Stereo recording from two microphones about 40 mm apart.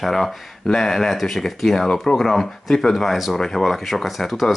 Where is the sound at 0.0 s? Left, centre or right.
Centre.